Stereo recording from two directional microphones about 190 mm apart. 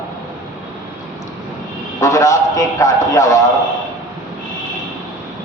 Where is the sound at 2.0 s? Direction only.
15° left (ahead or behind).